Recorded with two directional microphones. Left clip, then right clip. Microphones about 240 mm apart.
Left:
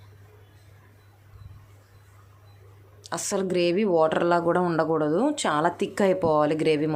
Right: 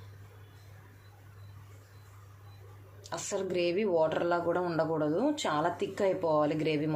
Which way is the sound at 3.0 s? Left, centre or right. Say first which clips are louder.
Left 7 dB; left.